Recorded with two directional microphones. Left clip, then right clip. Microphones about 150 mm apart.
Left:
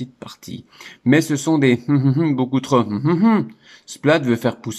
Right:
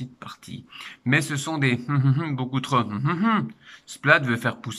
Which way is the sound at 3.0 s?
40° left (ahead or behind).